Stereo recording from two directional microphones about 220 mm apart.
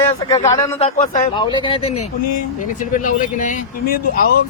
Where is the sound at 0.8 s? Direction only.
30° left (ahead or behind).